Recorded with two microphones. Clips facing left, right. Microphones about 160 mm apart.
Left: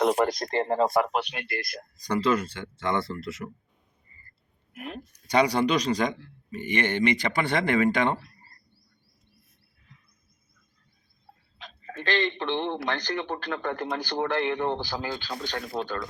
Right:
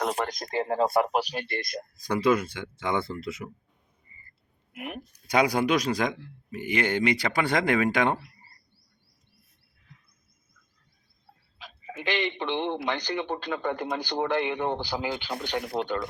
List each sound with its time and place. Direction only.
0.2 s speech: 5° right (ahead or behind)
2.1 s speech: 10° right (ahead or behind)
4.1 s a sound: 15° right (ahead or behind)
4.7 s speech: 20° right (ahead or behind)
5.3 s speech: 5° right (ahead or behind)
11.6 s speech: 10° right (ahead or behind)